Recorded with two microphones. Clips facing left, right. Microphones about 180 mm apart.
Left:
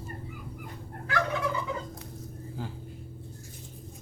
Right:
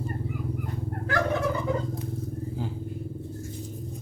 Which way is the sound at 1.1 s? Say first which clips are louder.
Right 3 dB; 45° right (ahead or behind).